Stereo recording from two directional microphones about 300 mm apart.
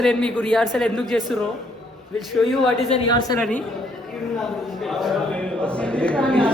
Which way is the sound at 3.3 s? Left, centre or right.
Centre.